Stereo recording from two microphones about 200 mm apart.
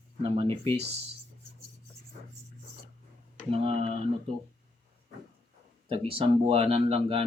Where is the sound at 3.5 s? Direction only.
30° right (ahead or behind).